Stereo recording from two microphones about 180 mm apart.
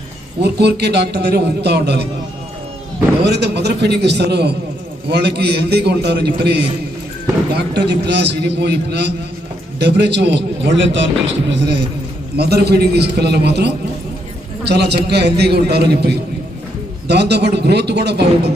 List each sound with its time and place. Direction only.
0.4 s a man's voice: 65° right (ahead or behind)
3.2 s a man's voice: 70° right (ahead or behind)